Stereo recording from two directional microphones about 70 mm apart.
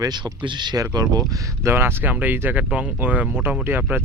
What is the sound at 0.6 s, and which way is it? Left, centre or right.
Speech, right.